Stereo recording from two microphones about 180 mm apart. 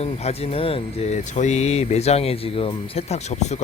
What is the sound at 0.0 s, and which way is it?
Speech, 35° left (ahead or behind).